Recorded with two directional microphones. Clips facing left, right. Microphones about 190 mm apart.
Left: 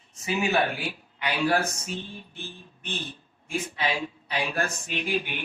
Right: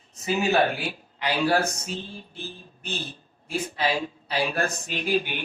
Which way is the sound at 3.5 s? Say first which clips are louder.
Right 3 dB; 35° right (ahead or behind).